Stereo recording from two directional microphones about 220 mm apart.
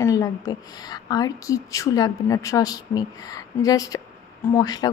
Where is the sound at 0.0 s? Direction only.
15° left (ahead or behind).